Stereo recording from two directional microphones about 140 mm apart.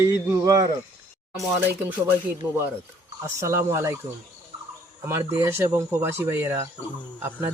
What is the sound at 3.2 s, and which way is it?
Speech, 20° right (ahead or behind).